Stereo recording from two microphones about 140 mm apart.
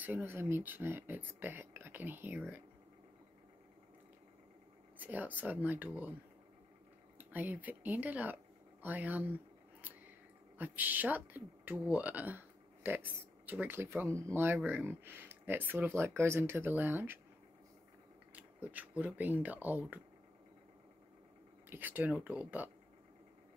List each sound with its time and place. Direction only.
0.0 s speech: 15° right (ahead or behind)
4.9 s speech: 10° right (ahead or behind)
7.2 s speech: 10° right (ahead or behind)
10.6 s speech: 15° right (ahead or behind)
18.3 s speech: 10° right (ahead or behind)
21.6 s speech: 15° right (ahead or behind)